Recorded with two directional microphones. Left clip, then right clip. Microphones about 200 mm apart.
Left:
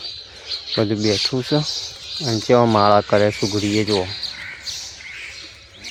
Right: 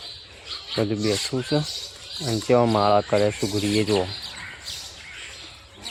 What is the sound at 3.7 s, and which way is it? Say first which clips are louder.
Speech: left 1 dB; 15° left (ahead or behind).